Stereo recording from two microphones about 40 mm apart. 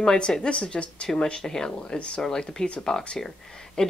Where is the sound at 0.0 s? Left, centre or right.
Centre.